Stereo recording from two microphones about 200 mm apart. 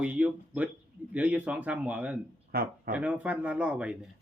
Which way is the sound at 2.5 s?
50° right (ahead or behind).